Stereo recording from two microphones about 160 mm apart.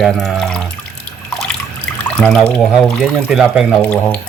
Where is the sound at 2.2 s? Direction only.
10° left (ahead or behind).